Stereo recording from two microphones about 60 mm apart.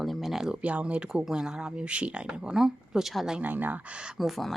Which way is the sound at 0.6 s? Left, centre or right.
Right.